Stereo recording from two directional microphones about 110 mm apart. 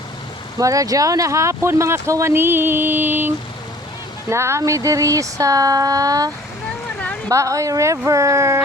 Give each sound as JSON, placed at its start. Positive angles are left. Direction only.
{"t": 0.6, "sound": "speech", "side_deg": -30}